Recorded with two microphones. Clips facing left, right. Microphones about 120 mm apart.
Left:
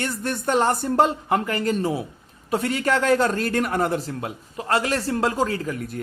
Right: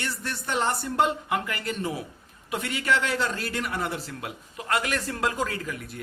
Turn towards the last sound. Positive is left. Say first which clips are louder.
# left 5 dB
turn(degrees=30)  # may be behind; listen again after turning